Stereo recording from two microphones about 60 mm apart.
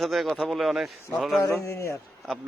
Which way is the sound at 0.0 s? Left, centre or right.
Centre.